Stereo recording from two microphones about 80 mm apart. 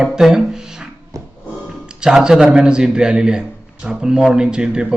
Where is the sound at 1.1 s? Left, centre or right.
Right.